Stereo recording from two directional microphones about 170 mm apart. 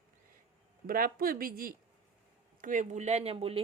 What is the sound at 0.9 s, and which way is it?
Speech, 55° right (ahead or behind).